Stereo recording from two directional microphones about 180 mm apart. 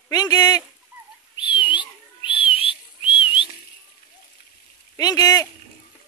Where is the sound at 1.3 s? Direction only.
25° left (ahead or behind).